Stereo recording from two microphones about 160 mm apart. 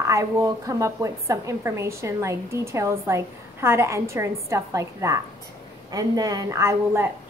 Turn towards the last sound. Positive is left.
turn(degrees=-15)  # may be behind; listen again after turning